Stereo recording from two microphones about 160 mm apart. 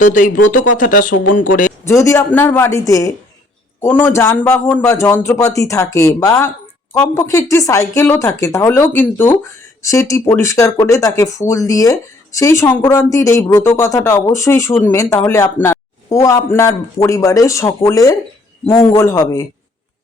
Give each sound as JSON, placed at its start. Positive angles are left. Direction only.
{"t": 0.0, "sound": "speech", "side_deg": 55}
{"t": 1.9, "sound": "speech", "side_deg": 20}